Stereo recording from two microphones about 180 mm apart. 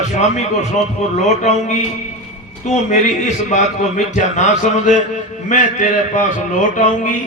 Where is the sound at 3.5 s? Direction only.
40° left (ahead or behind).